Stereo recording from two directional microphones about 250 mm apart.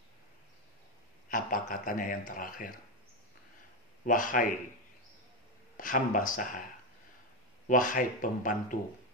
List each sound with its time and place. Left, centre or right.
1.3 s a man's voice: left
4.0 s a man's voice: left
5.8 s a man's voice: left
7.6 s a man's voice: left